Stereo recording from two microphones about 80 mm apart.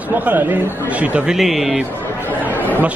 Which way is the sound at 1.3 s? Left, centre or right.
Centre.